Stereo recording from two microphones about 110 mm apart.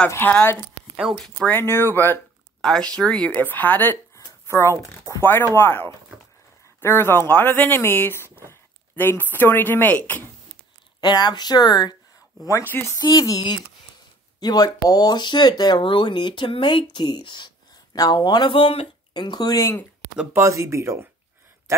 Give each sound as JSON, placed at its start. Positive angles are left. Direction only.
{"t": 0.1, "sound": "speech", "side_deg": 15}
{"t": 0.9, "sound": "speech", "side_deg": 0}
{"t": 1.5, "sound": "speech", "side_deg": 20}
{"t": 2.6, "sound": "speech", "side_deg": 5}
{"t": 11.0, "sound": "speech", "side_deg": 40}
{"t": 12.4, "sound": "speech", "side_deg": 25}
{"t": 13.0, "sound": "speech", "side_deg": 35}
{"t": 19.1, "sound": "speech", "side_deg": 40}
{"t": 20.3, "sound": "speech", "side_deg": -30}